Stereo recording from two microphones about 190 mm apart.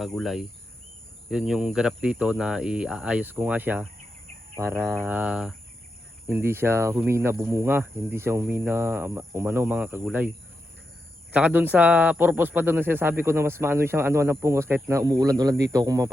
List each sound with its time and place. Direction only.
0.0 s speech: centre (ahead or behind)
11.3 s speech: 10° right (ahead or behind)